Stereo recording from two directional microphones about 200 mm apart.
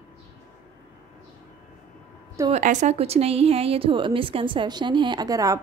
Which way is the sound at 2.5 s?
35° right (ahead or behind).